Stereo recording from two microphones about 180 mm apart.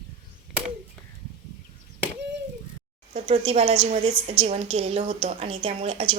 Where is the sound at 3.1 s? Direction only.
35° right (ahead or behind).